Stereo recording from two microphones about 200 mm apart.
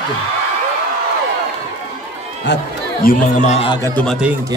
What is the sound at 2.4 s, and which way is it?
Speech, 50° left (ahead or behind).